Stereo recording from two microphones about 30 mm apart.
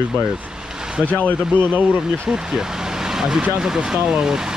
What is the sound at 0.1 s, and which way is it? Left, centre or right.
Vehicle, right.